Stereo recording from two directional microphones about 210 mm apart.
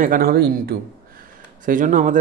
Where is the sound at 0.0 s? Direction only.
40° right (ahead or behind).